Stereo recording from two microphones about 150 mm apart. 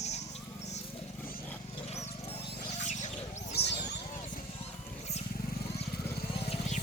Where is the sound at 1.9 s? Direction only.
45° left (ahead or behind).